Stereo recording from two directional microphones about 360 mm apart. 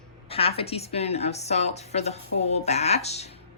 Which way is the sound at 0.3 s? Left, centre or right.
Centre.